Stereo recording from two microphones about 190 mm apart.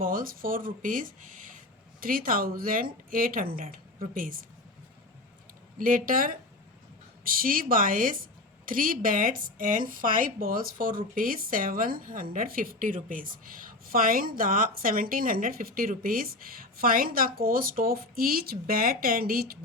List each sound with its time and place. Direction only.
0.0 s a woman's voice: 45° right (ahead or behind)
5.7 s a woman's voice: 45° right (ahead or behind)